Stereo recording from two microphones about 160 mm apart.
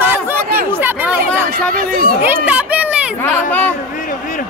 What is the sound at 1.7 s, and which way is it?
Speech, 65° right (ahead or behind).